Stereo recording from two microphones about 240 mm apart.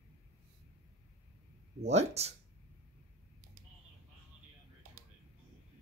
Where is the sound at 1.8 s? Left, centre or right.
Right.